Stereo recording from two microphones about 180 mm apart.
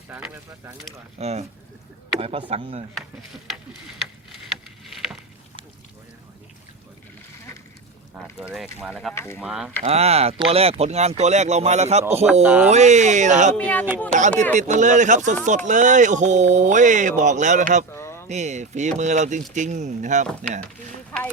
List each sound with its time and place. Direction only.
0.1 s speech: 10° right (ahead or behind)
1.2 s speech: 35° right (ahead or behind)
3.4 s speech: centre (ahead or behind)
8.1 s speech: 5° right (ahead or behind)
9.1 s speech: 15° left (ahead or behind)
9.4 s speech: 5° right (ahead or behind)
9.8 s speech: 35° right (ahead or behind)
12.2 s speech: 10° right (ahead or behind)
12.7 s speech: 40° right (ahead or behind)
13.6 s speech: 10° left (ahead or behind)
14.1 s speech: 45° right (ahead or behind)
17.9 s a sound: 15° left (ahead or behind)
18.3 s speech: 40° right (ahead or behind)